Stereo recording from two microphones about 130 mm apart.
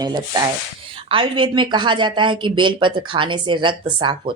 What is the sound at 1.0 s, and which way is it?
Speech, 45° right (ahead or behind).